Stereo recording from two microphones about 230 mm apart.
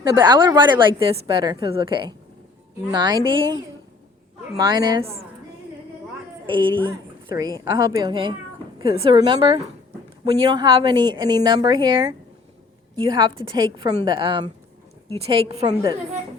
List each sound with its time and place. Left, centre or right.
0.0 s a woman's voice: centre
6.4 s a woman's voice: right